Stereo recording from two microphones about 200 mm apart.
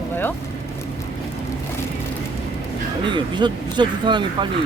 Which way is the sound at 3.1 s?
20° right (ahead or behind).